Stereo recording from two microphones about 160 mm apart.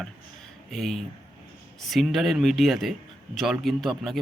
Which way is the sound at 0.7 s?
Centre (ahead or behind).